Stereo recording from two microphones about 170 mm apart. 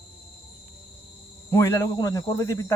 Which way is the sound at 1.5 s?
15° left (ahead or behind).